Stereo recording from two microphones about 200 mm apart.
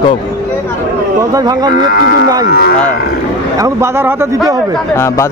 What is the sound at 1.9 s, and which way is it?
Speech, 50° left (ahead or behind).